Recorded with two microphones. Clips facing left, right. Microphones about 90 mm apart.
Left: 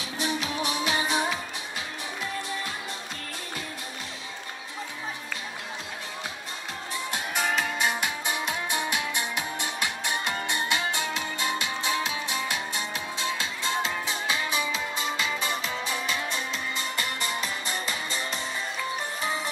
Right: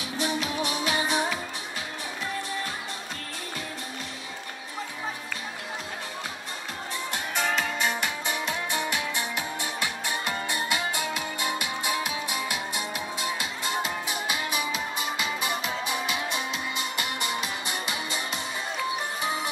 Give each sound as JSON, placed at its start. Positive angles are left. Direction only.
{"t": 0.2, "sound": "music", "side_deg": 20}
{"t": 7.1, "sound": "music", "side_deg": 15}